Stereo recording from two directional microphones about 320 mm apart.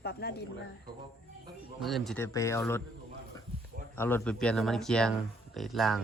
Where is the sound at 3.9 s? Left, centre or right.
Centre.